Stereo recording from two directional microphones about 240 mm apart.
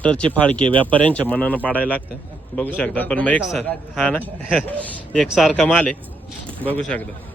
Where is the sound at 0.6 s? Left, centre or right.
Right.